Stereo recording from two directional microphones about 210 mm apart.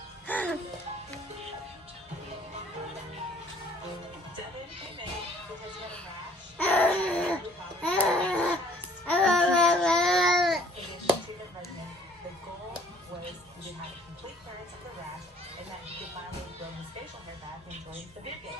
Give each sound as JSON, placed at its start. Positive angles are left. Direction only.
{"t": 0.3, "sound": "music", "side_deg": 5}
{"t": 6.6, "sound": "baby cry", "side_deg": 10}
{"t": 7.8, "sound": "a sound", "side_deg": 5}
{"t": 9.0, "sound": "babbling", "side_deg": 5}